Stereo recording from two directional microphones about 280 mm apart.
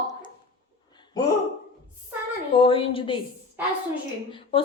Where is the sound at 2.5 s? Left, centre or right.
Centre.